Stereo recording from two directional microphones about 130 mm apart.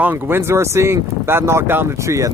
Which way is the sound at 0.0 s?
15° right (ahead or behind).